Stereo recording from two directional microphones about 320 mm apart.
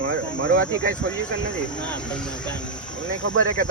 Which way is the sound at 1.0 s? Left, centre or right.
Right.